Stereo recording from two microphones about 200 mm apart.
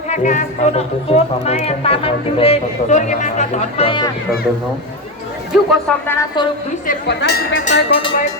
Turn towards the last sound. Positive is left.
turn(degrees=55)  # may be behind; listen again after turning